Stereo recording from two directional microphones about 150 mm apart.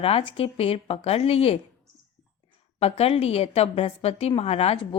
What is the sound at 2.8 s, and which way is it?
A woman's voice, 45° left (ahead or behind).